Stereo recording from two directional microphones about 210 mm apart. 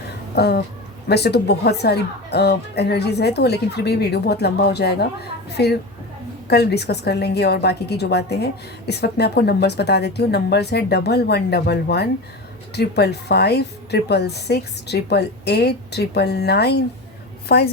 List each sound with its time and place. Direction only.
0.3 s speech: 50° left (ahead or behind)